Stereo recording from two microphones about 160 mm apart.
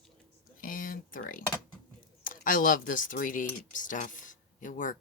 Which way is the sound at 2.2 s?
60° left (ahead or behind).